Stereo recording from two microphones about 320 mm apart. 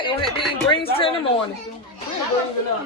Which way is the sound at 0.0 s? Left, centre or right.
Centre.